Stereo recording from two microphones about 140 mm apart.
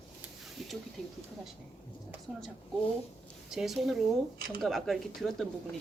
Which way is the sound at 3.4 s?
5° right (ahead or behind).